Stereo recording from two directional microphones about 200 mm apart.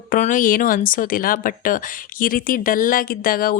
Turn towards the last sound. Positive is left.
turn(degrees=45)  # may be behind; listen again after turning